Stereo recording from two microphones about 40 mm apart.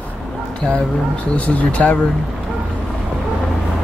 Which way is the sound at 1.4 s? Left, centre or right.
Left.